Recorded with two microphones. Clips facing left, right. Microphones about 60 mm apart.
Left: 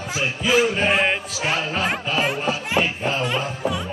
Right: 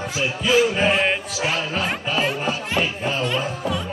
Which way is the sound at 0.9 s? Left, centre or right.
Centre.